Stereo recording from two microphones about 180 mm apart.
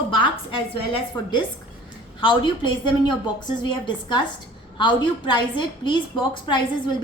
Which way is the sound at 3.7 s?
25° left (ahead or behind).